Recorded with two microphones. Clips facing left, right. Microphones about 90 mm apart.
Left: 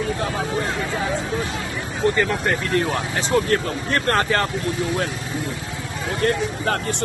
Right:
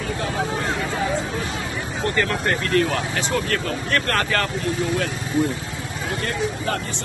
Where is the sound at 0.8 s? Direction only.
Centre (ahead or behind).